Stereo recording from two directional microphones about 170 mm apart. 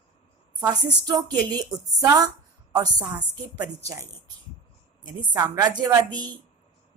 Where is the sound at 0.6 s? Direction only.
25° right (ahead or behind).